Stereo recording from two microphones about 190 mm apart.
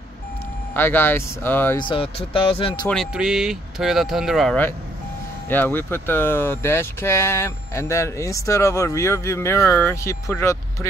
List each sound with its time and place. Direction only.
0.7 s speech: 10° left (ahead or behind)
1.8 s speech: 25° left (ahead or behind)
2.9 s speech: centre (ahead or behind)